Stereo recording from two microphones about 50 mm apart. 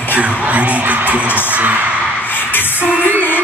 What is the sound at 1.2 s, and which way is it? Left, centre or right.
Music, left.